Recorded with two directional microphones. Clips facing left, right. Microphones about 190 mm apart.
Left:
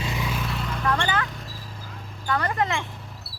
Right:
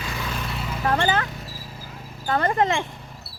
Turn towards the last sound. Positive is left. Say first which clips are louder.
# right 1 dB
turn(degrees=0)  # may be behind; listen again after turning